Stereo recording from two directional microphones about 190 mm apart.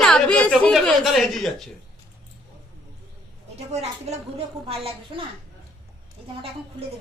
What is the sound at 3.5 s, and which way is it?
A woman's voice, 35° right (ahead or behind).